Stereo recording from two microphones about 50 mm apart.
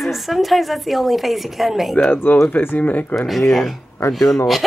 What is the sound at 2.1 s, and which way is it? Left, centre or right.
Speech, left.